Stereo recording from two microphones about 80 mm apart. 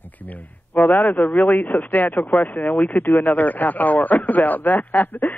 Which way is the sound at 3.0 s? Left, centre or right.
Left.